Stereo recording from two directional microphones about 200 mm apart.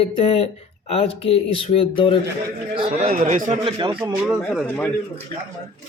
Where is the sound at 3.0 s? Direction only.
35° right (ahead or behind).